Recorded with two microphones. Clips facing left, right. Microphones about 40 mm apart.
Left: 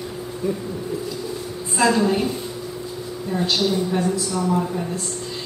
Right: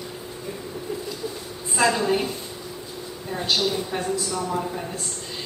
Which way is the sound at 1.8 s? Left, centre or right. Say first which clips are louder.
Left 3 dB; centre.